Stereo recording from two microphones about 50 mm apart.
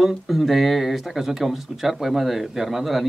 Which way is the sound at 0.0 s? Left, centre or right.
Centre.